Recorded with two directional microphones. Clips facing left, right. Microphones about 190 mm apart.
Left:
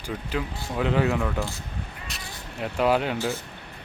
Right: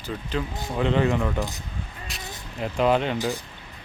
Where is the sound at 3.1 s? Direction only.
15° right (ahead or behind).